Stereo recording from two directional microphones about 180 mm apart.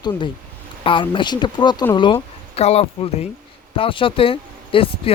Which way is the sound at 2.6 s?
35° left (ahead or behind).